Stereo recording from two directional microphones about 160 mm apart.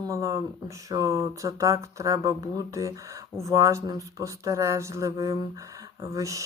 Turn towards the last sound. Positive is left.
turn(degrees=-20)  # may be behind; listen again after turning